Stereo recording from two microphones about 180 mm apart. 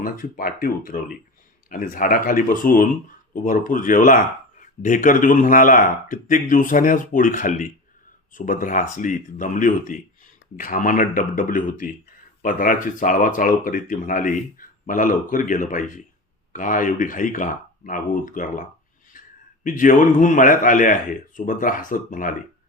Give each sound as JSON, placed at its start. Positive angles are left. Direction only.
{"t": 0.0, "sound": "speech", "side_deg": 50}
{"t": 19.1, "sound": "a sound", "side_deg": 50}
{"t": 19.6, "sound": "speech", "side_deg": 45}